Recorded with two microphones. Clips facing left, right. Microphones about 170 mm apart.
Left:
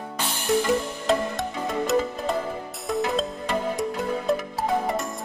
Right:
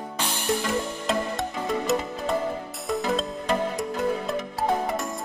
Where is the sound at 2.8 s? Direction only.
Centre (ahead or behind).